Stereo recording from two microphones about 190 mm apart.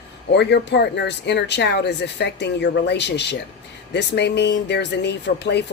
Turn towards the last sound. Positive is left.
turn(degrees=65)  # may be behind; listen again after turning